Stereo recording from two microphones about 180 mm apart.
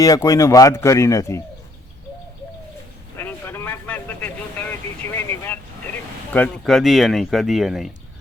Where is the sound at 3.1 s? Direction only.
10° left (ahead or behind).